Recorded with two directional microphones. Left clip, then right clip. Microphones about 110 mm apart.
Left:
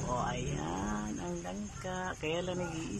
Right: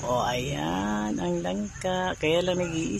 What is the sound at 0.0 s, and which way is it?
Speech, 35° right (ahead or behind).